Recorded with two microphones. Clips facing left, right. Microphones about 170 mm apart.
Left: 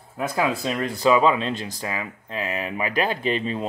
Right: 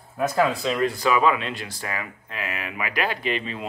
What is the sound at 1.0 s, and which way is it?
Speech, 25° left (ahead or behind).